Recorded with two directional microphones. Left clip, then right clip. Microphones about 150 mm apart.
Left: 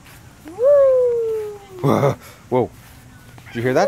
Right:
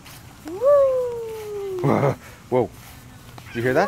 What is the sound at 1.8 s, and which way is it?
Speech, 40° left (ahead or behind).